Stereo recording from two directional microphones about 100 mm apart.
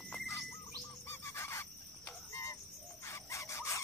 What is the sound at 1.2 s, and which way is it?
Fowl, 25° left (ahead or behind).